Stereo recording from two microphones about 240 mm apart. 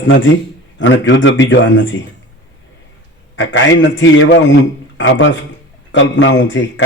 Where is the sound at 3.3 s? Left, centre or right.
Left.